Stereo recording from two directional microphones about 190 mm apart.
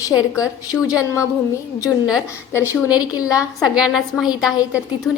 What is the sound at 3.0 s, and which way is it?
Speech, 20° left (ahead or behind).